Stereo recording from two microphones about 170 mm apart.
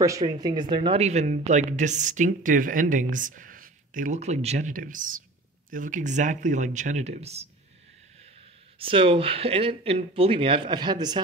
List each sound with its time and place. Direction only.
0.0 s speech: 20° right (ahead or behind); by 7.4 s 40° right (ahead or behind)
8.7 s speech: 30° right (ahead or behind)